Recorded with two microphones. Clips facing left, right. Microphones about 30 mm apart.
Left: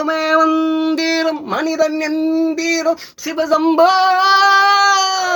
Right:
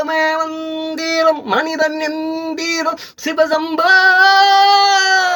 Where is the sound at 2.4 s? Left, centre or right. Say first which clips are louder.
Left 2 dB; right.